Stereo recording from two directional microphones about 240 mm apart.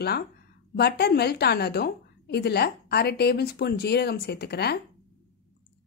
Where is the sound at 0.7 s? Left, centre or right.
Left.